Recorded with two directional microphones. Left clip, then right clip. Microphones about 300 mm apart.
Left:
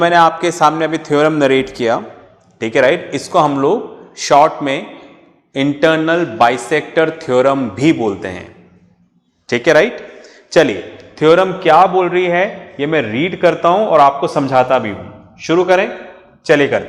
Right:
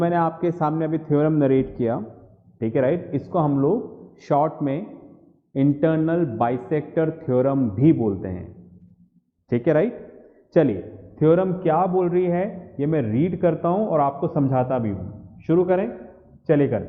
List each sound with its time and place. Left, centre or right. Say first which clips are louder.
0.0 s a man's voice: left 11 dB; centre